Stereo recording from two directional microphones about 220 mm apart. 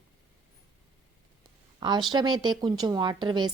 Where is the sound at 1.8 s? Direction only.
20° right (ahead or behind).